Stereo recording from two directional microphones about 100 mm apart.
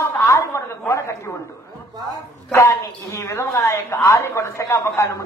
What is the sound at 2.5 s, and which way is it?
A man's voice, 30° left (ahead or behind).